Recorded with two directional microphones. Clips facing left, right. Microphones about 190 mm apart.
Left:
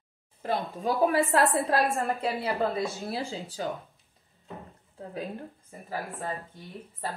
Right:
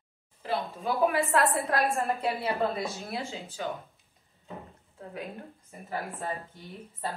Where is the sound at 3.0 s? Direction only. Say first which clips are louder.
Left 3 dB; 35° left (ahead or behind).